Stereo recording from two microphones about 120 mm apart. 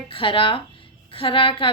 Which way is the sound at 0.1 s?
45° left (ahead or behind).